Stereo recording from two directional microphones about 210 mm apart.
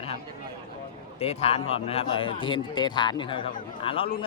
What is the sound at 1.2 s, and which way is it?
A man's voice, 30° left (ahead or behind).